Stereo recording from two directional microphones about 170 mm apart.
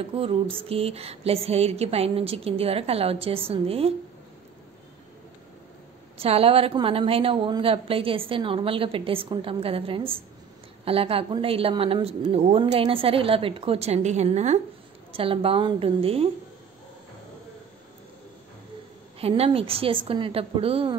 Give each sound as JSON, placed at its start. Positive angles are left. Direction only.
{"t": 0.1, "sound": "a woman's voice", "side_deg": -35}
{"t": 6.1, "sound": "a woman's voice", "side_deg": -35}
{"t": 19.1, "sound": "a woman's voice", "side_deg": -35}